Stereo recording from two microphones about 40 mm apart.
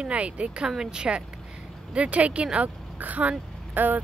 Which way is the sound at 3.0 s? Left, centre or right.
Right.